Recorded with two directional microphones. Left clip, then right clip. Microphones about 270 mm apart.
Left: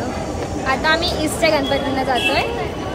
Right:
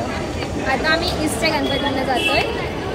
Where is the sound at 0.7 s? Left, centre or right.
Centre.